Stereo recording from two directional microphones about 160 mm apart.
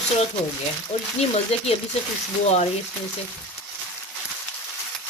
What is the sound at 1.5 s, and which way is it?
Speech, 40° left (ahead or behind).